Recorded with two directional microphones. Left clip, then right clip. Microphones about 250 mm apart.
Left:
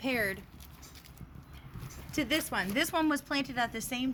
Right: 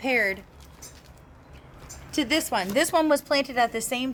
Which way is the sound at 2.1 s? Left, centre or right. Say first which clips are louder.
Right 7 dB; centre.